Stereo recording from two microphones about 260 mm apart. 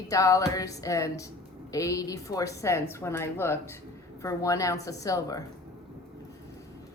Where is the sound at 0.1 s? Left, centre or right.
Centre.